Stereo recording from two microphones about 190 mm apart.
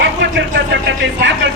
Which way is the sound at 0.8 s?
75° right (ahead or behind).